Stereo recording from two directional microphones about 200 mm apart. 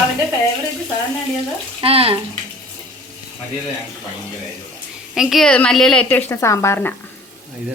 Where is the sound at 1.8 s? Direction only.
30° right (ahead or behind).